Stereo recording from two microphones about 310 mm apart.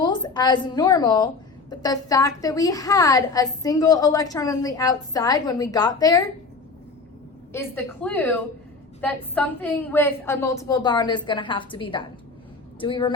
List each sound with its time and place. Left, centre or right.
0.0 s a woman's voice: centre
7.5 s a woman's voice: centre